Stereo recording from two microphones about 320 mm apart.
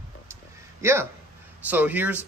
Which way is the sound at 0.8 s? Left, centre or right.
Centre.